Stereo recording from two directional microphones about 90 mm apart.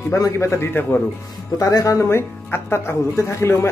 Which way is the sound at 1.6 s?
40° left (ahead or behind).